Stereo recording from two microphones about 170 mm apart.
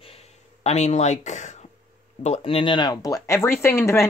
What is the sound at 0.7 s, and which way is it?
Speech, 40° left (ahead or behind).